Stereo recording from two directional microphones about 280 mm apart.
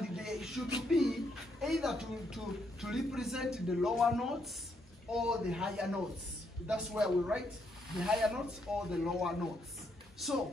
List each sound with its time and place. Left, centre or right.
0.0 s music: centre
0.8 s speech: centre